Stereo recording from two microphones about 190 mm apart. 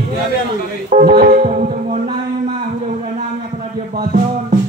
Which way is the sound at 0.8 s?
40° right (ahead or behind).